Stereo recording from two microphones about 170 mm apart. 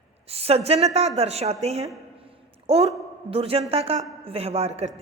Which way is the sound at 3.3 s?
35° right (ahead or behind).